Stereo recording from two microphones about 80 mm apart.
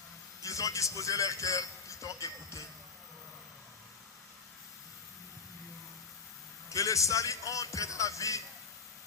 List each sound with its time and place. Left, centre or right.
0.4 s a man's voice: left
6.7 s a man's voice: left